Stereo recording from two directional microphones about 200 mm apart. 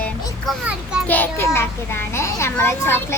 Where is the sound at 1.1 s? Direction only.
10° left (ahead or behind).